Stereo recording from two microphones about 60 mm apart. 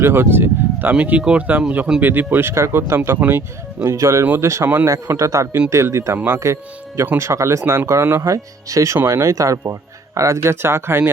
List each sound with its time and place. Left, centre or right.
0.0 s speech: right
0.9 s speech: right
3.2 s speech: right
3.9 s a man's voice: right
4.6 s speech: right
4.9 s a man's voice: right
6.1 s speech: right
6.4 s a man's voice: right
8.2 s a man's voice: right